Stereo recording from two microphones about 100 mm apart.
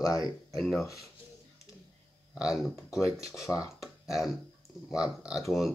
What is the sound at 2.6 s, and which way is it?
Speech, 30° left (ahead or behind).